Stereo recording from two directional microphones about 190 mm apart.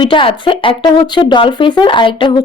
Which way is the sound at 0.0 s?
25° left (ahead or behind).